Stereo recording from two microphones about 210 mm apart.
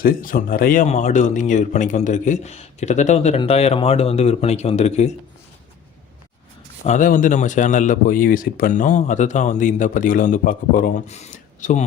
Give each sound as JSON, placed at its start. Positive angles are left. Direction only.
{"t": 0.0, "sound": "speech", "side_deg": 40}
{"t": 6.8, "sound": "speech", "side_deg": 35}